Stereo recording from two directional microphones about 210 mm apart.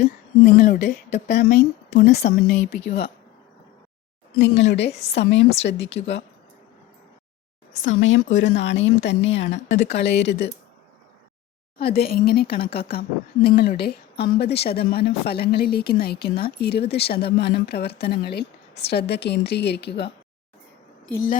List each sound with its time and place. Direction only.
0.4 s speech: 45° left (ahead or behind)
1.4 s a woman's voice: 50° left (ahead or behind)
4.4 s speech: 55° left (ahead or behind)
6.0 s a woman's voice: 45° left (ahead or behind)
7.9 s a woman's voice: 65° left (ahead or behind)
11.8 s a woman's voice: 45° left (ahead or behind)